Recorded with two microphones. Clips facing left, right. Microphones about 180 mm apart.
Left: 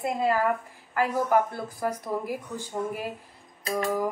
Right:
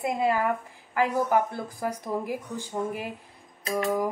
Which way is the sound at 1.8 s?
10° right (ahead or behind).